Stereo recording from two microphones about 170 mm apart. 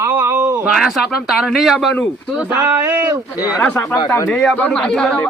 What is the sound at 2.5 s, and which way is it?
Speech, 10° right (ahead or behind).